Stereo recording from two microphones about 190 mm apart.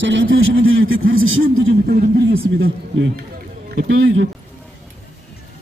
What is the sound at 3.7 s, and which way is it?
Speech, 90° right.